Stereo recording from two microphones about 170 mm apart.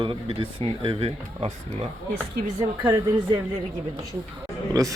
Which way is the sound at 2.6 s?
20° right (ahead or behind).